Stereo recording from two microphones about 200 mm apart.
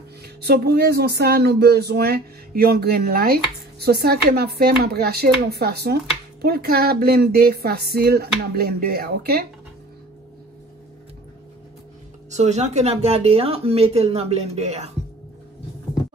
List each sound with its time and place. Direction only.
0.2 s speech: 55° right (ahead or behind)
12.3 s speech: 35° right (ahead or behind)